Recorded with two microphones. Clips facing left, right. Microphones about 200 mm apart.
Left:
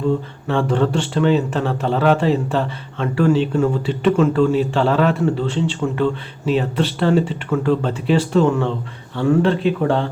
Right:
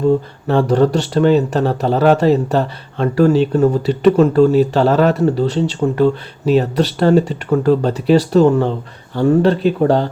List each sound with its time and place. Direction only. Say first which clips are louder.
0.4 s speech: right 5 dB; 40° right (ahead or behind)